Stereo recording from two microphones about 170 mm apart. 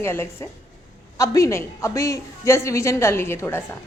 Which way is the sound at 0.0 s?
15° left (ahead or behind).